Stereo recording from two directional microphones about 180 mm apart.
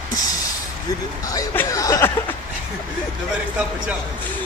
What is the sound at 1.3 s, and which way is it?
Chuckle, 15° left (ahead or behind).